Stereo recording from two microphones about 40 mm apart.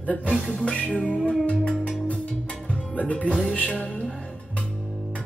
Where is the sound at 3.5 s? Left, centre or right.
Left.